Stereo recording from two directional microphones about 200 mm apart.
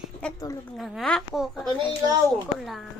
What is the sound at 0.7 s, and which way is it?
A child's voice, centre (ahead or behind).